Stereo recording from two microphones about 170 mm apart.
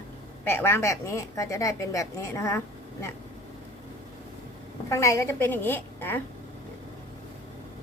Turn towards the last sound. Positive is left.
turn(degrees=10)  # may be behind; listen again after turning